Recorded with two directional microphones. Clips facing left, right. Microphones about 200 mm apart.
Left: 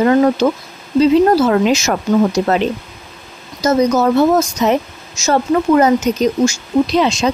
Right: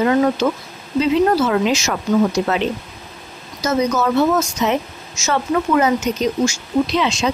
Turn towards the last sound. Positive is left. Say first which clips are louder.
# left 4 dB
turn(degrees=40)  # may be behind; listen again after turning